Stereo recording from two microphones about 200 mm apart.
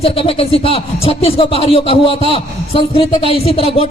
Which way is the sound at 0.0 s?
30° left (ahead or behind).